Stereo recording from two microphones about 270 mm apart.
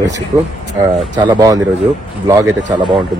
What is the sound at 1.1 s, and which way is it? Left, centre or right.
Speech, centre.